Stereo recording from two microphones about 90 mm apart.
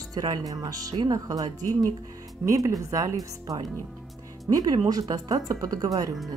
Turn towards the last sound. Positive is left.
turn(degrees=-40)  # may be behind; listen again after turning